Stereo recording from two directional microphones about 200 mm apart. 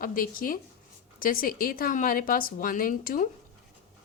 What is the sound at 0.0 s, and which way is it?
A woman's voice, 45° left (ahead or behind).